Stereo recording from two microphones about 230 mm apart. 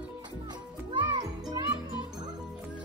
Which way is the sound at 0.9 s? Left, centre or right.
Centre.